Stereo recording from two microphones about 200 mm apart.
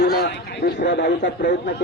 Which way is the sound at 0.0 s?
55° left (ahead or behind).